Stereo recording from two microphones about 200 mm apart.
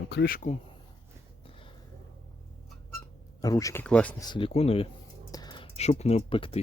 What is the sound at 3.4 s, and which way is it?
Speech, 15° left (ahead or behind).